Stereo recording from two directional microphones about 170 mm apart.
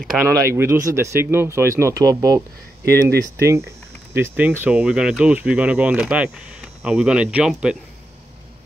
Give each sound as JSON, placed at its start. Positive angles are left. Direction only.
{"t": 0.2, "sound": "speech", "side_deg": -15}